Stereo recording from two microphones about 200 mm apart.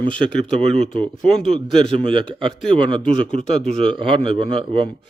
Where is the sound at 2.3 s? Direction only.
25° right (ahead or behind).